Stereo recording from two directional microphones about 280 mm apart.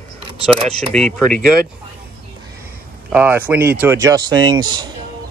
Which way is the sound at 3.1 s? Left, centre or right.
Centre.